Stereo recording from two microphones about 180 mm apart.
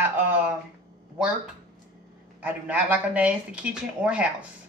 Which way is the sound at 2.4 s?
10° right (ahead or behind).